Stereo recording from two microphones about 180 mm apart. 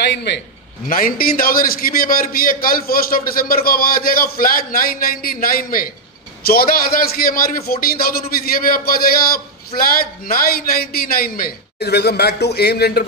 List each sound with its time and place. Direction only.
0.0 s a man's voice: 70° left (ahead or behind)
0.8 s a man's voice: 50° left (ahead or behind)